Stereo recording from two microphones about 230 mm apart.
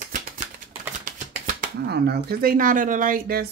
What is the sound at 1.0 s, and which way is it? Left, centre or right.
Speech, right.